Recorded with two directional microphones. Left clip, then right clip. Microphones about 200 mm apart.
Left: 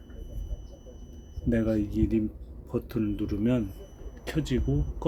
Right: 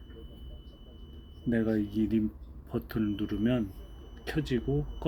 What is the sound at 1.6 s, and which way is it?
Speech, 15° left (ahead or behind).